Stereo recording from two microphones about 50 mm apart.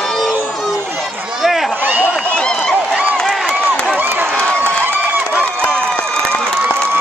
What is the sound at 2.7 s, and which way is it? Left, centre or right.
Run, right.